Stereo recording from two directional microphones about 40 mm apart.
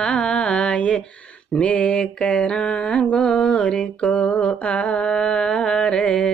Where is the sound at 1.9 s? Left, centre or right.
Left.